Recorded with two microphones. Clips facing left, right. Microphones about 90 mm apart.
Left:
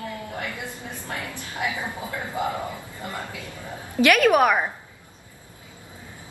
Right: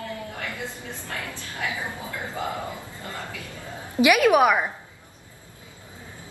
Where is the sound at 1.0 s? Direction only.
20° left (ahead or behind).